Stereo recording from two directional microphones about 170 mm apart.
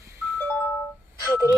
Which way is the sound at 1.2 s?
20° left (ahead or behind).